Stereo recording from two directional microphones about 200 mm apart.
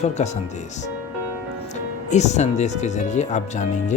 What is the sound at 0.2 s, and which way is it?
Speech, 35° left (ahead or behind).